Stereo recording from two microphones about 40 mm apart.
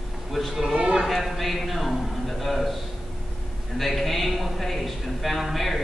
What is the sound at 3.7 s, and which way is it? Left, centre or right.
Speech, centre.